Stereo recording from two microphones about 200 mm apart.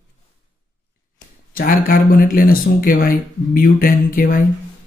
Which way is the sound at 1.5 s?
45° left (ahead or behind).